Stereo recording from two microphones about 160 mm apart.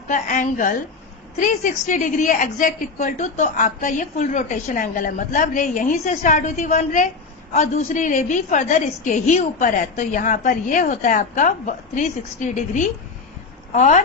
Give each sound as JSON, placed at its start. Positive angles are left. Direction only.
{"t": 0.1, "sound": "a woman's voice", "side_deg": 50}